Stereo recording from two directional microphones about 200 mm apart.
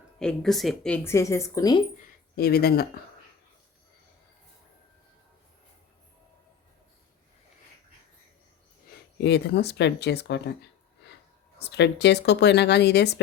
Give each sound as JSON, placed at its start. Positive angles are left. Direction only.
{"t": 0.2, "sound": "speech", "side_deg": 5}
{"t": 2.3, "sound": "speech", "side_deg": 50}
{"t": 9.2, "sound": "speech", "side_deg": 55}
{"t": 11.6, "sound": "speech", "side_deg": 55}